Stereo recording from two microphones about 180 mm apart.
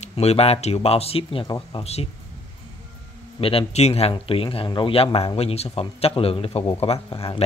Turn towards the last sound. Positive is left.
turn(degrees=30)  # may be behind; listen again after turning